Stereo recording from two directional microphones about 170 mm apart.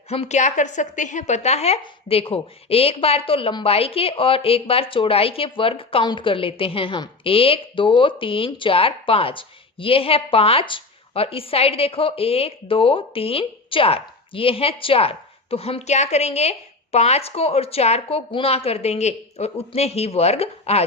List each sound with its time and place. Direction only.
0.1 s a woman's voice: 40° left (ahead or behind)